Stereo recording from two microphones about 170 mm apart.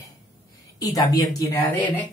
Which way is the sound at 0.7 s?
20° left (ahead or behind).